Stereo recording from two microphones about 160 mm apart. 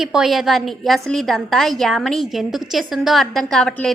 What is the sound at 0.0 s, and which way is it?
A woman's voice, 5° right (ahead or behind).